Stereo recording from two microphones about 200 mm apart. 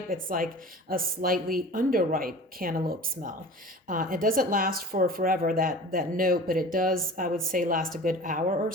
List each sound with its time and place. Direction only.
0.1 s a woman's voice: 45° right (ahead or behind)